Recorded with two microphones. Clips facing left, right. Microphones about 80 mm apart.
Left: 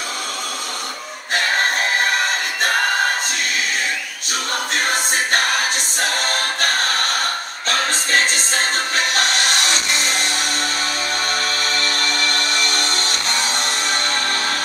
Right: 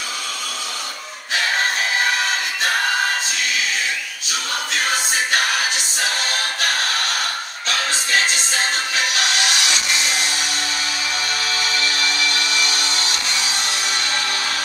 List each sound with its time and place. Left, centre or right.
4.3 s choir: left
7.6 s music: left
11.4 s music: left